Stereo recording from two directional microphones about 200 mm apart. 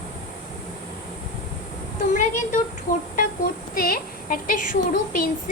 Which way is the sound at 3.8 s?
45° left (ahead or behind).